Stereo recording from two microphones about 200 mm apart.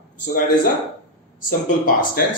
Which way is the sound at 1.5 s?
45° left (ahead or behind).